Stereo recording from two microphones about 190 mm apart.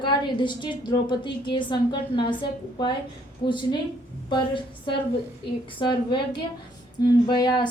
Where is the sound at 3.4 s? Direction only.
25° left (ahead or behind).